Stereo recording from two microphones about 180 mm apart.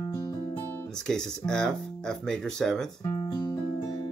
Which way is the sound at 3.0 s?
20° left (ahead or behind).